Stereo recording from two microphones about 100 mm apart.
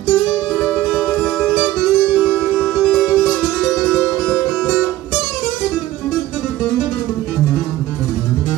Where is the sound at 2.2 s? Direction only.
10° left (ahead or behind).